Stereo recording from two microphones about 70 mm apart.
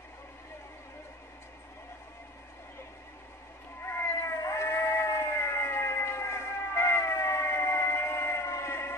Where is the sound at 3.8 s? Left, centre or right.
Left.